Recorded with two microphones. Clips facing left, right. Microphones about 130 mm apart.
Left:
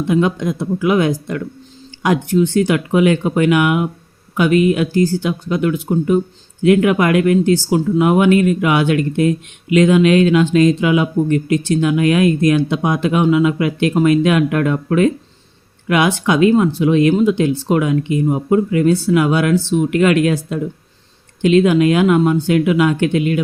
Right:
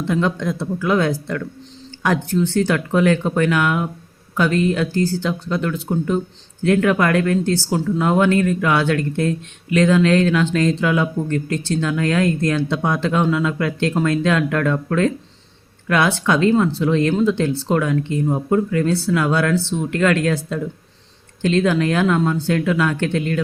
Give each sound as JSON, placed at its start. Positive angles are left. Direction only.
{"t": 0.0, "sound": "speech", "side_deg": 15}